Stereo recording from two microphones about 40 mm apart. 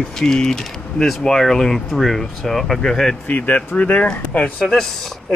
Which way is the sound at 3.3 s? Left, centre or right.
Left.